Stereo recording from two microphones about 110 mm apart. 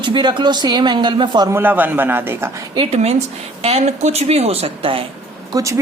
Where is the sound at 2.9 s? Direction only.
75° right (ahead or behind); by 5.0 s 60° right (ahead or behind).